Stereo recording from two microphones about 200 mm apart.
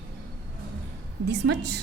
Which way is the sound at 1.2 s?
55° right (ahead or behind).